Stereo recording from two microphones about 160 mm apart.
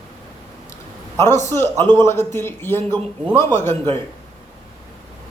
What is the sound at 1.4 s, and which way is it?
Speech, 15° left (ahead or behind).